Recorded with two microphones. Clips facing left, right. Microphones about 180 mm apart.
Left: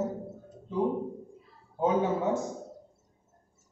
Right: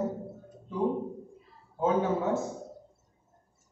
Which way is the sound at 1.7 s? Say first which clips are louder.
Even; 15° left (ahead or behind).